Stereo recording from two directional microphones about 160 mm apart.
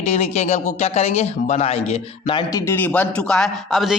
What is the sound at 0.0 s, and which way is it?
Speech, 45° left (ahead or behind).